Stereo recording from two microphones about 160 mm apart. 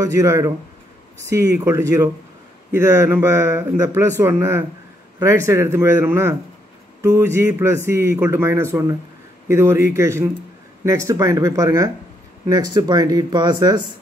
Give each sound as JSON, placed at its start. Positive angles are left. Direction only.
{"t": 0.0, "sound": "speech", "side_deg": -20}